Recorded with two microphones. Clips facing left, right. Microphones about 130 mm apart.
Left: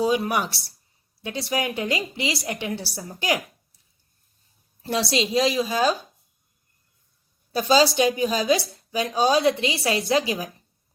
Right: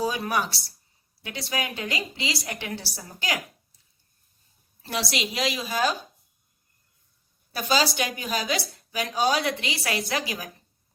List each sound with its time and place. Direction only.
0.0 s a woman's voice: 20° left (ahead or behind)
4.8 s a woman's voice: 25° left (ahead or behind)
7.5 s a woman's voice: 25° left (ahead or behind)